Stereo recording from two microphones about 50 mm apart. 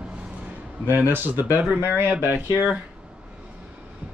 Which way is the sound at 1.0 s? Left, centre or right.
Right.